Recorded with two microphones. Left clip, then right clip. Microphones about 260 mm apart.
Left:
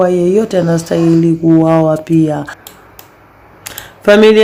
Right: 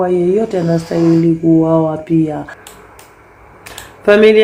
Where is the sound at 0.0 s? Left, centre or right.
Left.